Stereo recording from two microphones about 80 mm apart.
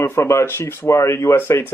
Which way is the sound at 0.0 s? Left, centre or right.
Left.